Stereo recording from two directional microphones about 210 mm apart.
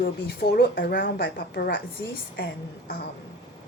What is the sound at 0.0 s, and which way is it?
A woman's voice, 50° left (ahead or behind).